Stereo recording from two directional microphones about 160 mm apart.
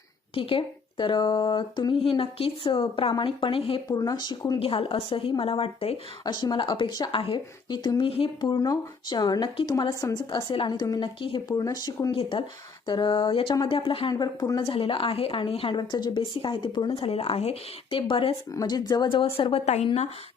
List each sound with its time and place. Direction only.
0.3 s speech: 35° left (ahead or behind)
3.8 s speech: 25° left (ahead or behind)
6.2 s speech: 25° left (ahead or behind)
10.2 s speech: 35° left (ahead or behind)
18.5 s speech: 25° left (ahead or behind); by 20.1 s 40° left (ahead or behind)